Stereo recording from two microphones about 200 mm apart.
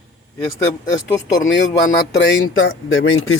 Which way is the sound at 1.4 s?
60° left (ahead or behind).